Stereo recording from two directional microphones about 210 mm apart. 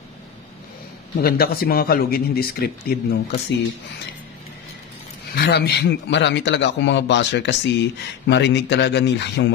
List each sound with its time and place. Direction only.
1.2 s speech: 45° left (ahead or behind)
5.3 s a man's voice: 50° left (ahead or behind)